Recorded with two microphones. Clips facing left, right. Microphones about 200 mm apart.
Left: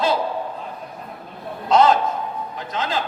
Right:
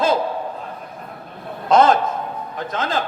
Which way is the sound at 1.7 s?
50° right (ahead or behind).